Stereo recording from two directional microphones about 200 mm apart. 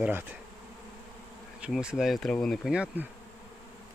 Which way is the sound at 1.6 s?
5° right (ahead or behind).